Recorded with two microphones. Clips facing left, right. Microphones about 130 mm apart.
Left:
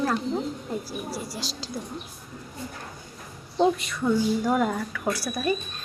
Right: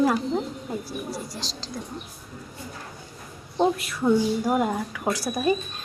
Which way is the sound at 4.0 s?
20° right (ahead or behind).